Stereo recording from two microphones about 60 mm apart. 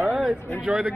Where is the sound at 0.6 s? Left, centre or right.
Right.